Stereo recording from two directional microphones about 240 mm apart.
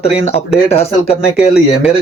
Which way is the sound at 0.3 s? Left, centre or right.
Left.